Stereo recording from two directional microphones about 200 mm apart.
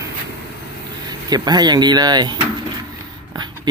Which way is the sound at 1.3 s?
20° right (ahead or behind).